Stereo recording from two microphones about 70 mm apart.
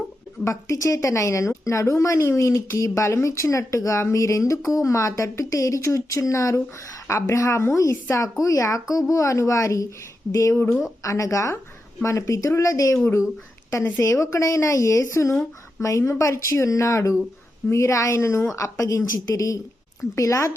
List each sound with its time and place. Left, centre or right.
0.4 s a woman's voice: left
14.0 s a woman's voice: left